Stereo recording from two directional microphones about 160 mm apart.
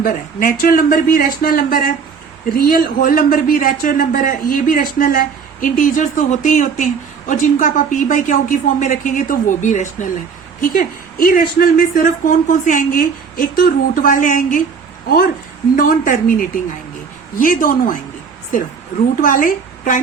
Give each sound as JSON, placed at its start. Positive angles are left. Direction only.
{"t": 0.0, "sound": "a woman's voice", "side_deg": 60}
{"t": 15.7, "sound": "a woman's voice", "side_deg": 55}